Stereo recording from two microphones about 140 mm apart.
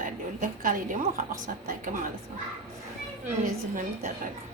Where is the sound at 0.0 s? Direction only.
75° right (ahead or behind).